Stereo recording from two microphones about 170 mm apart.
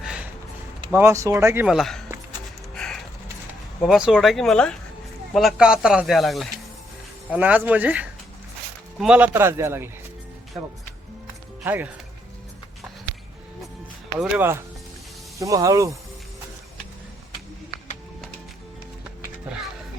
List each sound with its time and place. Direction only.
0.0 s a sound: 5° right (ahead or behind)
0.9 s a man's voice: 15° right (ahead or behind)
1.6 s speech: centre (ahead or behind)
2.7 s music: 5° left (ahead or behind)
3.8 s a man's voice: 5° right (ahead or behind)
11.6 s speech: 10° right (ahead or behind)
14.2 s a man's voice: 10° right (ahead or behind)